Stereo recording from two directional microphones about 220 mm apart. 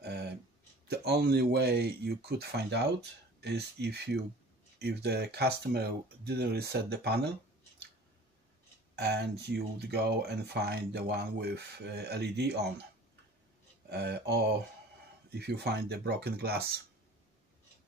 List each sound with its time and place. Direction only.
0.0 s a sound: 50° right (ahead or behind)
0.8 s speech: 45° right (ahead or behind)
8.9 s speech: 50° right (ahead or behind)
13.8 s speech: 50° right (ahead or behind)